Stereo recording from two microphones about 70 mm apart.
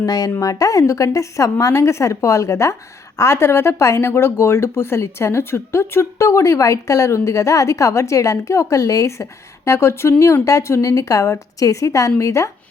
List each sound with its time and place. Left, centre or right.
0.0 s speech: left